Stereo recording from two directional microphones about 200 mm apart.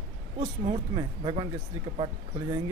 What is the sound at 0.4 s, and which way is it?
Speech, 35° right (ahead or behind).